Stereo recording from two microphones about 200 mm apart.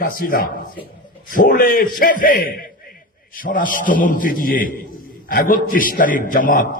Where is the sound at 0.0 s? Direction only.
45° left (ahead or behind).